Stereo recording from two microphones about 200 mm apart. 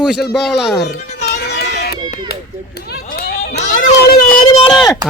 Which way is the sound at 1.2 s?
55° left (ahead or behind).